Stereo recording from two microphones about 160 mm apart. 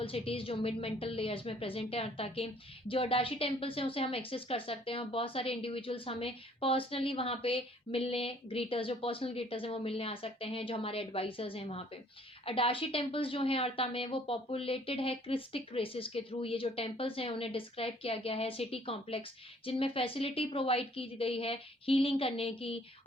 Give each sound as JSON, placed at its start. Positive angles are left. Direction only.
{"t": 0.0, "sound": "a woman's voice", "side_deg": 35}